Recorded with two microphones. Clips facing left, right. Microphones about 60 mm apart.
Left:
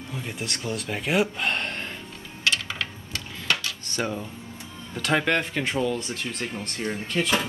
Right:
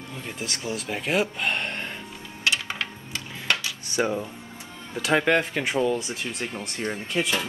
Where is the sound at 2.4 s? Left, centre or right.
Right.